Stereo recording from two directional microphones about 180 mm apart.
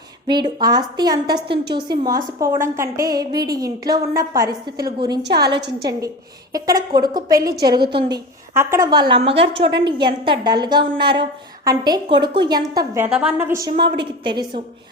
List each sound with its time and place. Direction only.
0.3 s a woman's voice: 25° right (ahead or behind)
5.5 s a woman's voice: 70° right (ahead or behind)
6.5 s a woman's voice: 20° right (ahead or behind)
9.5 s a woman's voice: 80° right
9.7 s a woman's voice: 25° right (ahead or behind)
13.1 s a woman's voice: 5° right (ahead or behind)
13.8 s a woman's voice: 25° right (ahead or behind)